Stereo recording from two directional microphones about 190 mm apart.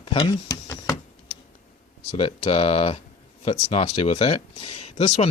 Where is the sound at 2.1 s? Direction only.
30° left (ahead or behind).